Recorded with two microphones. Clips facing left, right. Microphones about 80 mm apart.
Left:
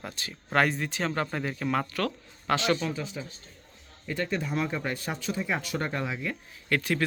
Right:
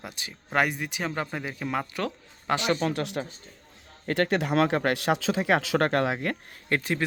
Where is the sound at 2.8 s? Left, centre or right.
Right.